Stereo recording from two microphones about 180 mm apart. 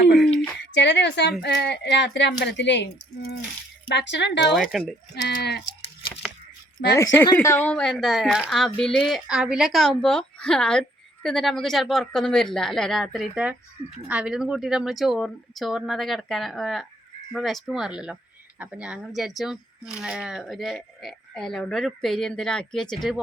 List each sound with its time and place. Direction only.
0.6 s a woman's voice: 75° left (ahead or behind)
3.9 s a woman's voice: 75° left (ahead or behind)
4.4 s speech: centre (ahead or behind)
5.1 s a woman's voice: 65° left (ahead or behind)
6.9 s speech: 15° left (ahead or behind)